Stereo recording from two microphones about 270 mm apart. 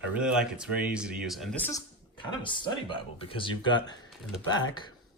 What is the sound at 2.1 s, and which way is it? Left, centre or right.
Speech, centre.